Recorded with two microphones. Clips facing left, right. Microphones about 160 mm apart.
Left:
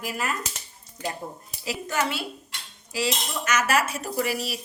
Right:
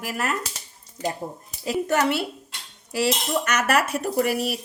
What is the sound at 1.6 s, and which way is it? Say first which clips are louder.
Speech: right 6 dB; 55° right (ahead or behind).